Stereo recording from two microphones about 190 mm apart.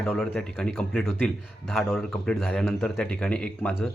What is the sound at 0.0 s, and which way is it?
Speech, 5° left (ahead or behind).